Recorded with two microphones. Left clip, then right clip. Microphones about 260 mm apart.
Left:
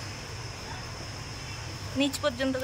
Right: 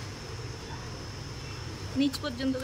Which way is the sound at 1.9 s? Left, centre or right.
Centre.